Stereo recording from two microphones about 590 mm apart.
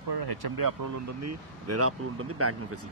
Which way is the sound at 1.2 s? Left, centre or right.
Right.